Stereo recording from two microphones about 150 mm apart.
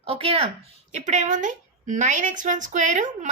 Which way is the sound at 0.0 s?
40° right (ahead or behind).